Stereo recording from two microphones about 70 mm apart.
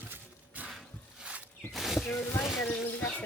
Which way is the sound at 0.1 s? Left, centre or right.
Right.